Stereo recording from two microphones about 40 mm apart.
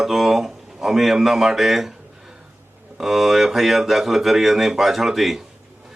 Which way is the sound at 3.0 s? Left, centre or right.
Centre.